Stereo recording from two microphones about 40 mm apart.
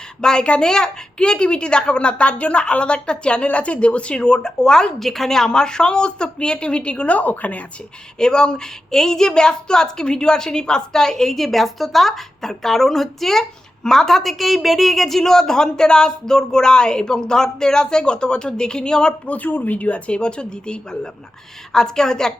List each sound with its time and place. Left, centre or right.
0.2 s a woman's voice: centre; by 7.6 s left
8.2 s a woman's voice: centre
19.2 s a woman's voice: left; by 22.3 s centre